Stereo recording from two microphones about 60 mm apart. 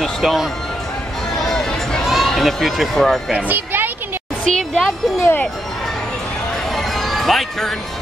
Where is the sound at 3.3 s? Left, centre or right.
Right.